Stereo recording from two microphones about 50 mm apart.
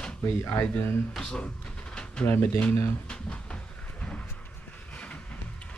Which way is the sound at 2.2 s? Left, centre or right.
Left.